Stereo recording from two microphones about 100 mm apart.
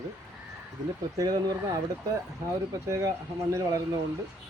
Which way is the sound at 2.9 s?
30° right (ahead or behind).